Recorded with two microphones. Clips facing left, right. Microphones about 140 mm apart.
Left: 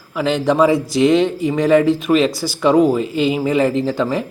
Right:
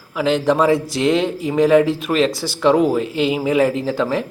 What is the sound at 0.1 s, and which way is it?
Speech, centre (ahead or behind).